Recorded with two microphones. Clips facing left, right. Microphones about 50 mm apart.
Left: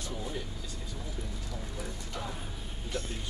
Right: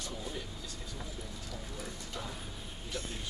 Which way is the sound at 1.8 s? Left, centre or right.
Left.